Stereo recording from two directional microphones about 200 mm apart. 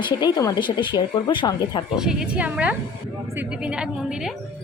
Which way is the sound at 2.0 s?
5° right (ahead or behind).